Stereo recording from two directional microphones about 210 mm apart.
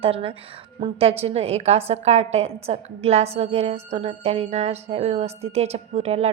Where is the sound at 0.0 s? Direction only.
25° right (ahead or behind).